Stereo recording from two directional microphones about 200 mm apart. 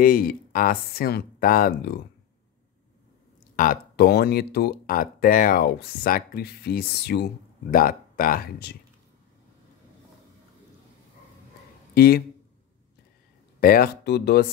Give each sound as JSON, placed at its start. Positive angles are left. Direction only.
{"t": 0.0, "sound": "speech", "side_deg": 45}
{"t": 3.5, "sound": "speech", "side_deg": 45}
{"t": 11.9, "sound": "speech", "side_deg": 50}
{"t": 13.6, "sound": "speech", "side_deg": 45}